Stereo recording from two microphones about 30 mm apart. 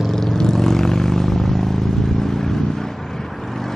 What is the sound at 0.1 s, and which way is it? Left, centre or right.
Vehicle, centre.